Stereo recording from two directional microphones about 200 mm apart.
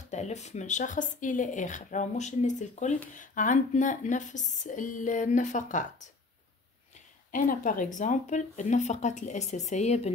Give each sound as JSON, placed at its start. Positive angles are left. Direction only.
{"t": 0.1, "sound": "speech", "side_deg": 35}
{"t": 7.2, "sound": "speech", "side_deg": 45}